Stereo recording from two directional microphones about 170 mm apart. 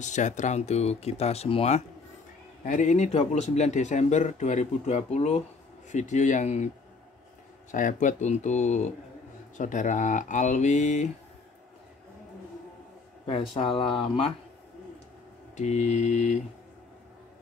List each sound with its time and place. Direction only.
0.0 s speech: 45° left (ahead or behind)
2.6 s speech: 50° left (ahead or behind)
7.7 s speech: 50° left (ahead or behind)
13.6 s speech: 30° left (ahead or behind)
15.5 s speech: 40° left (ahead or behind)